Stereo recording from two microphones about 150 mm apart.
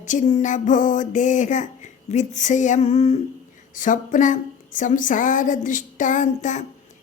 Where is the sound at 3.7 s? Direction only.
60° left (ahead or behind).